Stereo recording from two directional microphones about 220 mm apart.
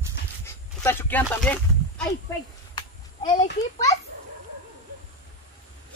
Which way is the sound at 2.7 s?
20° left (ahead or behind).